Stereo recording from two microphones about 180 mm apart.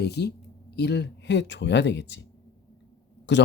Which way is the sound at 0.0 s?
65° left (ahead or behind).